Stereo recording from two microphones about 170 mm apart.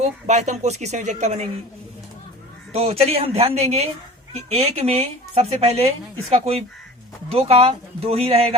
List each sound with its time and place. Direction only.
0.0 s a woman's voice: 45° right (ahead or behind)
2.7 s speech: 35° right (ahead or behind)